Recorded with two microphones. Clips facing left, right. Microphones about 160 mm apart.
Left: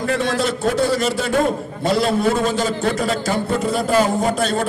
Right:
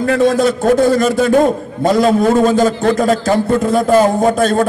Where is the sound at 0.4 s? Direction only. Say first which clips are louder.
Right 7 dB; 50° right (ahead or behind).